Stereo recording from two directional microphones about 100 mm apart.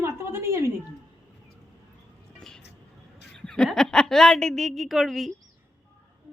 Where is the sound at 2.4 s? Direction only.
5° left (ahead or behind).